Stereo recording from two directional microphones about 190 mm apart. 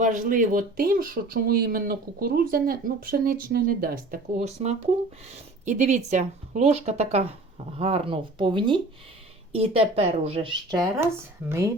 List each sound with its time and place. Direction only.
0.0 s speech: 45° right (ahead or behind)
11.0 s speech: 15° right (ahead or behind)